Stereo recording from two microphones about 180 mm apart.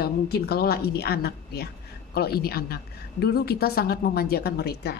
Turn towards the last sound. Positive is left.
turn(degrees=60)  # may be behind; listen again after turning